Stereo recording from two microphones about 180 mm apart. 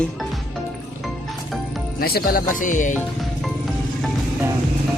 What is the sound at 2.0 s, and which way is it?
Speech, 55° left (ahead or behind).